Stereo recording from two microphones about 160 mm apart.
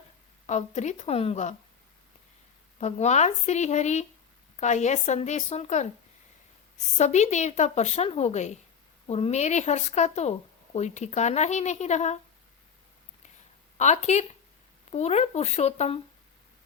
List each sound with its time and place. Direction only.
0.4 s a woman's voice: 45° left (ahead or behind)
2.8 s a woman's voice: 45° left (ahead or behind)
13.7 s a woman's voice: 45° left (ahead or behind)